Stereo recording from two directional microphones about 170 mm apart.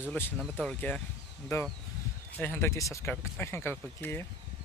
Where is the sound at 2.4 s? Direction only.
15° left (ahead or behind).